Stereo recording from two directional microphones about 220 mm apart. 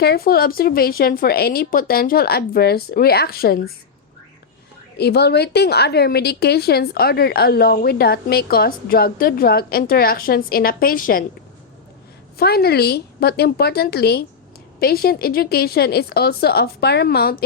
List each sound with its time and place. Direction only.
0.0 s a woman's voice: 45° left (ahead or behind)
4.9 s a woman's voice: 50° left (ahead or behind)
12.4 s a woman's voice: 45° left (ahead or behind)